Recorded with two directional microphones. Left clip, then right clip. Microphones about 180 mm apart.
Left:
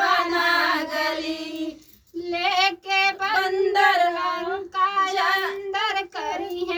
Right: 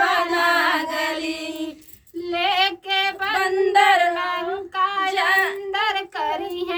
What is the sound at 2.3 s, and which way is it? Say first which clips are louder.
Child singing: right 1 dB; centre (ahead or behind).